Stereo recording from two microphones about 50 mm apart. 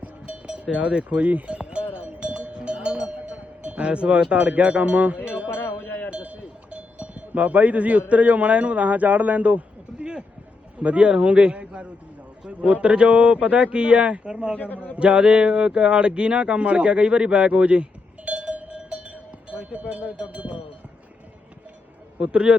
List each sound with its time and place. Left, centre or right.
0.0 s cowbell: right
3.2 s speech: right
5.5 s a sound: left
6.1 s cowbell: right
8.1 s a man's voice: right
14.5 s a man's voice: left
14.9 s speech: right
18.3 s cowbell: right
22.2 s speech: centre